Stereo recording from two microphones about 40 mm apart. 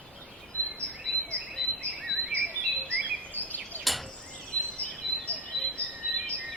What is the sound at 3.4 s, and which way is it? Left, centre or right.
Bird vocalization, right.